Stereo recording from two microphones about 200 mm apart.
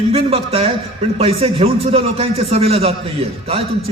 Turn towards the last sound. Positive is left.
turn(degrees=-30)  # may be behind; listen again after turning